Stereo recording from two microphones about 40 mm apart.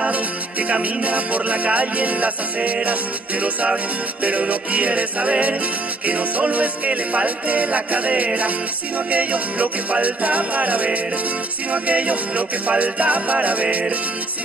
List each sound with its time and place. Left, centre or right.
0.1 s music: right